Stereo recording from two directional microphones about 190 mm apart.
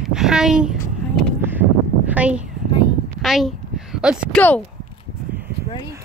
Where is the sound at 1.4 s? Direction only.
10° right (ahead or behind).